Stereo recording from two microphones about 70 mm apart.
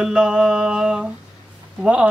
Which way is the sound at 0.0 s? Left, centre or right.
Centre.